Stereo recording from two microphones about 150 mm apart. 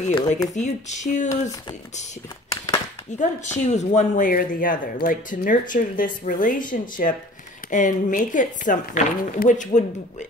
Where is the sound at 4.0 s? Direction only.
60° left (ahead or behind).